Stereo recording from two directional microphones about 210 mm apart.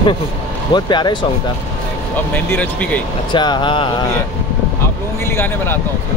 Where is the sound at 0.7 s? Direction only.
20° left (ahead or behind).